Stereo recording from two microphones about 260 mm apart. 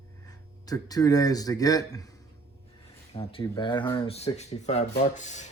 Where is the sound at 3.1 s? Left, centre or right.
Left.